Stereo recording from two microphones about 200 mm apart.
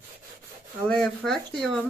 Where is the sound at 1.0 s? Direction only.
5° left (ahead or behind).